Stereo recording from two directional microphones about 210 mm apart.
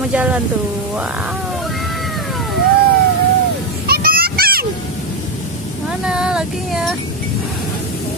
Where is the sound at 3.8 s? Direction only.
45° right (ahead or behind).